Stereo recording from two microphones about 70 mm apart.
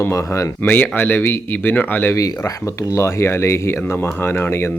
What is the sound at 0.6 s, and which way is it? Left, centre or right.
Speech, left.